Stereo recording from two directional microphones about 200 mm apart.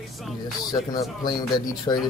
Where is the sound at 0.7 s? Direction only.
20° left (ahead or behind).